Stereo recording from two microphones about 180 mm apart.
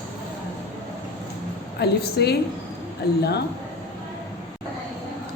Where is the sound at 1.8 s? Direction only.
65° left (ahead or behind).